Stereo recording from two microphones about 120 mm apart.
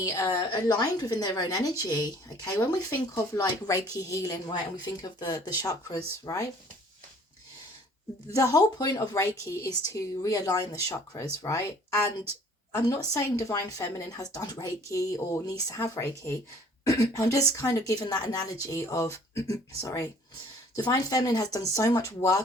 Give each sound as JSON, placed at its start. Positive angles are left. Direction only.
{"t": 0.0, "sound": "a woman's voice", "side_deg": 30}
{"t": 8.4, "sound": "a woman's voice", "side_deg": 30}